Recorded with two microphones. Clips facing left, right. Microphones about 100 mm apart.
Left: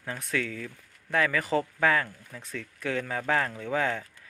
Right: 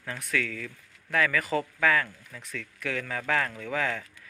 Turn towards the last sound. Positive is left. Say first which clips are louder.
# left 2 dB
turn(degrees=30)  # may be behind; listen again after turning